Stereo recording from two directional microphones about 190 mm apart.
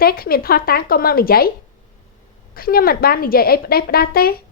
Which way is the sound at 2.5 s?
50° left (ahead or behind).